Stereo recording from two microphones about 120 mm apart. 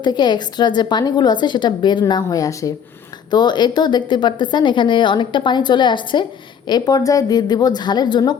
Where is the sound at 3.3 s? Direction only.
40° left (ahead or behind).